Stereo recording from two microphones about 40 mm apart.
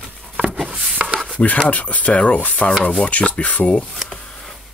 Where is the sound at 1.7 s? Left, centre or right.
Left.